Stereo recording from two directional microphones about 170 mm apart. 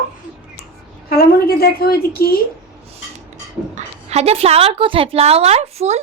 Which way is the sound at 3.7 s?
40° right (ahead or behind).